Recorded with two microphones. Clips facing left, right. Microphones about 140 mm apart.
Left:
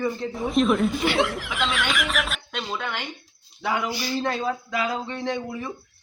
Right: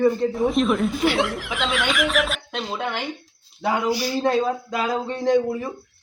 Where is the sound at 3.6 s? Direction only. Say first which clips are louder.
Right 4 dB; 40° right (ahead or behind).